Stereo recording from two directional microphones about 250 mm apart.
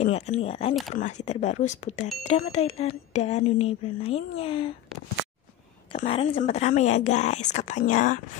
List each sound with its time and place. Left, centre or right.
0.0 s speech: left
5.9 s speech: left